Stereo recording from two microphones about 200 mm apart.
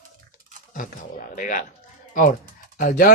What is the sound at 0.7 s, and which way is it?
Speech, 40° left (ahead or behind).